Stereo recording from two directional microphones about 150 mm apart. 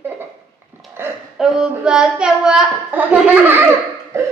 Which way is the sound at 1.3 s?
5° right (ahead or behind).